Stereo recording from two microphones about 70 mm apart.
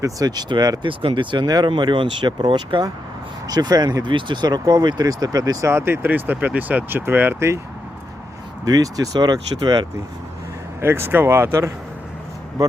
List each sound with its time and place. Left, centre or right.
0.0 s speech: right
3.4 s speech: right
5.6 s speech: right
6.1 s speech: right
7.3 s speech: right
8.6 s speech: right
10.8 s speech: right
12.6 s speech: right